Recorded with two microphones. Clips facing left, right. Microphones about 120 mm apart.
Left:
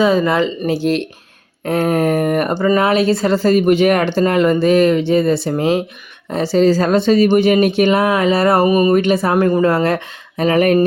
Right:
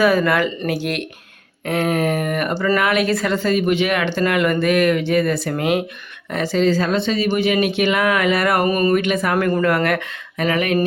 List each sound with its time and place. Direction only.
0.0 s speech: 20° left (ahead or behind)
8.6 s speech: 10° left (ahead or behind)
8.9 s speech: 35° left (ahead or behind)
9.3 s speech: 20° left (ahead or behind); by 10.8 s 40° left (ahead or behind)